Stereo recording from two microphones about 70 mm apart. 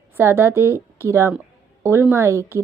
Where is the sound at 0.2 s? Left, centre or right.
Right.